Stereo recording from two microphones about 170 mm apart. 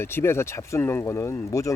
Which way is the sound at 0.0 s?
15° left (ahead or behind).